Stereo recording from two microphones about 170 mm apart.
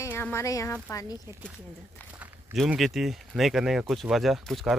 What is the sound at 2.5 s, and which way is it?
Speech, centre (ahead or behind).